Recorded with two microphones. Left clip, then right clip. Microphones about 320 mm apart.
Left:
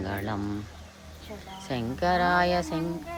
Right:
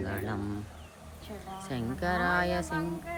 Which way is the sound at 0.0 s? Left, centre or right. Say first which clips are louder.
Left 3 dB; centre.